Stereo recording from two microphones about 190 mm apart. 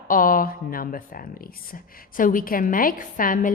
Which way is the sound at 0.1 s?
45° left (ahead or behind).